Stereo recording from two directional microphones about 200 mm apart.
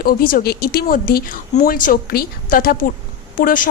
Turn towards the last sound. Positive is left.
turn(degrees=40)  # may be behind; listen again after turning